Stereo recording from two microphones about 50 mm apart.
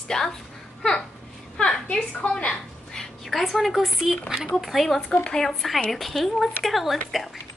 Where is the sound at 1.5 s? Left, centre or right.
Centre.